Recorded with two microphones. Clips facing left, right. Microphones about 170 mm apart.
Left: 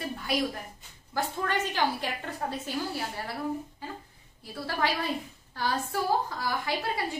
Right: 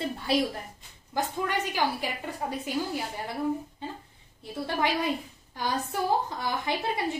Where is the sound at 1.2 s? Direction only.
10° right (ahead or behind).